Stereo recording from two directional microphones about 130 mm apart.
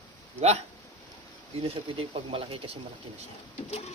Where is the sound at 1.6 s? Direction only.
45° right (ahead or behind).